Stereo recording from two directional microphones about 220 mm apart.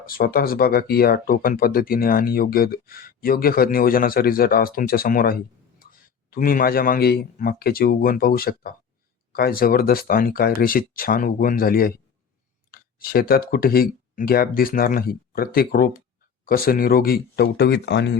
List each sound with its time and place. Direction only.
0.0 s speech: 40° left (ahead or behind)